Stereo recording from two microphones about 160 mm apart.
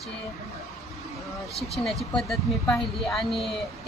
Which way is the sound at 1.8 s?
Centre (ahead or behind).